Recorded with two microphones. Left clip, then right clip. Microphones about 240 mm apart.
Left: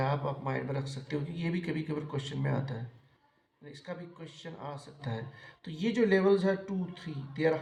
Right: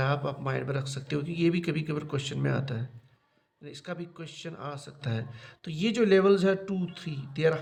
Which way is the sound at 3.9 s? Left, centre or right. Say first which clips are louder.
Right 4 dB; right.